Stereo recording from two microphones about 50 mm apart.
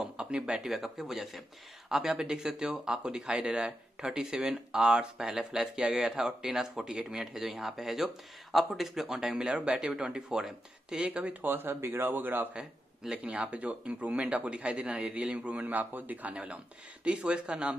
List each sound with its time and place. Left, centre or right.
0.0 s a sound: centre
0.5 s speech: centre
11.4 s speech: right
12.5 s speech: centre
13.2 s speech: right
15.6 s a man's voice: right; by 17.7 s centre